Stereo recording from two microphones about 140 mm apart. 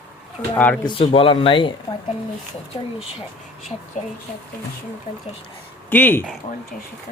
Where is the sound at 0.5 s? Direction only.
10° left (ahead or behind).